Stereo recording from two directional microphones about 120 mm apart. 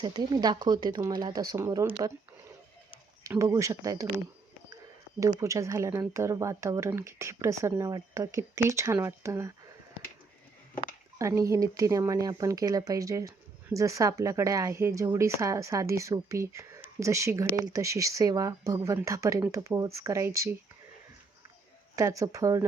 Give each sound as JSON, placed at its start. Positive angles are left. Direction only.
{"t": 0.0, "sound": "speech", "side_deg": -35}
{"t": 3.2, "sound": "speech", "side_deg": -25}
{"t": 5.4, "sound": "speech", "side_deg": -25}
{"t": 11.2, "sound": "speech", "side_deg": -25}
{"t": 21.9, "sound": "speech", "side_deg": -25}